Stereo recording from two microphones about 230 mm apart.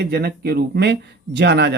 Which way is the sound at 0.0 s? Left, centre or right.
Right.